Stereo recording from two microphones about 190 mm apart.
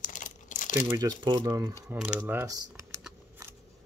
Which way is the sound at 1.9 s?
5° right (ahead or behind).